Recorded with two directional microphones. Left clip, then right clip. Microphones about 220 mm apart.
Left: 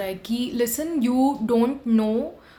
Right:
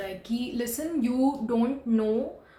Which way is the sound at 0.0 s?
40° left (ahead or behind).